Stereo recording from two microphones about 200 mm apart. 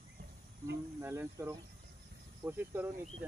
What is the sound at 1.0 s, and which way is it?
Speech, 15° right (ahead or behind).